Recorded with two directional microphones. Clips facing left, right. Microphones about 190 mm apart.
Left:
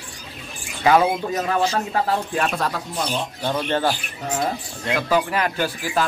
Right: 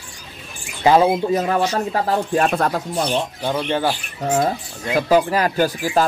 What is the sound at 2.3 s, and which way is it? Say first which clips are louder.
Speech: right 5 dB; 45° right (ahead or behind).